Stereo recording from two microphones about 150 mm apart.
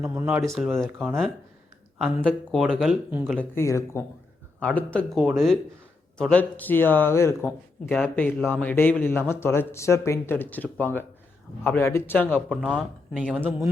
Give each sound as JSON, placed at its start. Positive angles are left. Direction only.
{"t": 0.0, "sound": "speech", "side_deg": -15}
{"t": 0.4, "sound": "speech", "side_deg": 0}
{"t": 3.2, "sound": "speech", "side_deg": 10}
{"t": 12.5, "sound": "speech", "side_deg": -5}